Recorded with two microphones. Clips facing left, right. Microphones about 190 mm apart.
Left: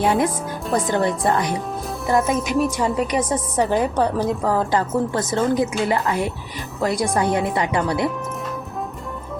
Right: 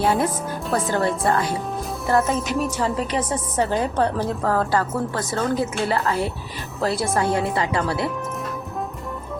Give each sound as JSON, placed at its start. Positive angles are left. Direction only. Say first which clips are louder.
{"t": 0.0, "sound": "a woman's voice", "louder": "left 1 dB", "side_deg": 15}